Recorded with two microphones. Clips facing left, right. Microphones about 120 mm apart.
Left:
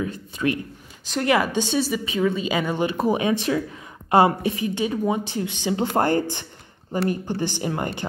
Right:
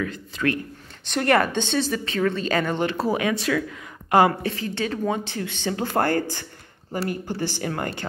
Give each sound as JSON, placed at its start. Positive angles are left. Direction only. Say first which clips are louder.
{"t": 0.0, "sound": "speech", "louder": "left 1 dB", "side_deg": 20}
{"t": 1.0, "sound": "speech", "louder": "right 1 dB", "side_deg": 5}